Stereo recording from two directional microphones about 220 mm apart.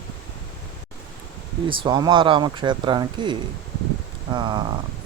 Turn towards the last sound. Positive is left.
turn(degrees=-20)  # may be behind; listen again after turning